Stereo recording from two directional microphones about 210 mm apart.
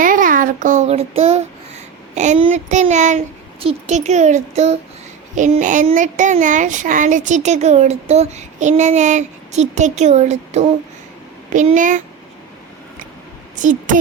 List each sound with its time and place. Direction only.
0.0 s child singing: 40° right (ahead or behind)
2.1 s a child's voice: 35° right (ahead or behind)
13.6 s a child's voice: 35° right (ahead or behind)